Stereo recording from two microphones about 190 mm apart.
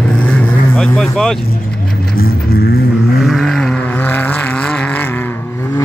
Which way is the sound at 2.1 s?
55° left (ahead or behind).